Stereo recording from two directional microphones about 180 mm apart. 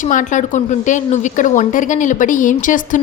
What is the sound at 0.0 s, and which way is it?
A woman's voice, 45° left (ahead or behind).